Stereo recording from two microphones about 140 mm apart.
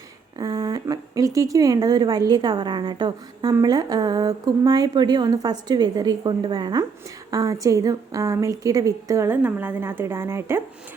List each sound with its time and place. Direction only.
0.3 s speech: 25° right (ahead or behind)